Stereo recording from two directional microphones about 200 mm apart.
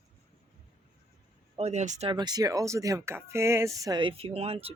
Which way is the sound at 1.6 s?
35° right (ahead or behind).